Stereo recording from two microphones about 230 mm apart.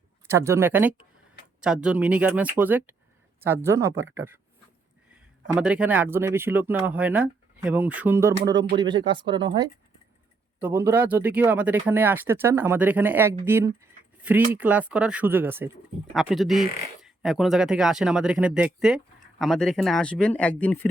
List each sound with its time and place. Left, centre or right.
0.3 s speech: centre
5.5 s speech: centre
10.6 s speech: centre